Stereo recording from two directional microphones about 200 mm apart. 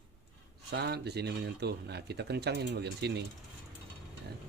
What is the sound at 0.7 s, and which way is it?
Speech, 55° right (ahead or behind).